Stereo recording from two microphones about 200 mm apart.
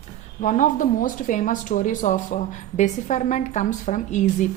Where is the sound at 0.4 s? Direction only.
40° left (ahead or behind).